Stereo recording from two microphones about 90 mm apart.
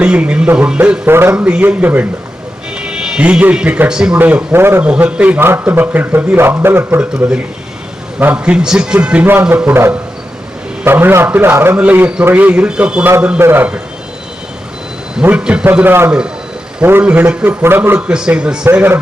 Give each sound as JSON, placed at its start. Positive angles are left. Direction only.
{"t": 0.0, "sound": "a man's voice", "side_deg": -15}
{"t": 2.7, "sound": "speech", "side_deg": -10}
{"t": 4.2, "sound": "a man's voice", "side_deg": -20}
{"t": 4.8, "sound": "a man's voice", "side_deg": -15}
{"t": 7.0, "sound": "a man's voice", "side_deg": -15}
{"t": 10.8, "sound": "a man's voice", "side_deg": -25}
{"t": 13.4, "sound": "a man's voice", "side_deg": -25}
{"t": 15.2, "sound": "a man's voice", "side_deg": -15}
{"t": 18.1, "sound": "a man's voice", "side_deg": -10}